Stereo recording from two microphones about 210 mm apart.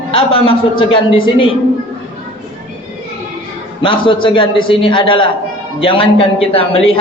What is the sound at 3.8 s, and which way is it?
A man's voice, 25° left (ahead or behind).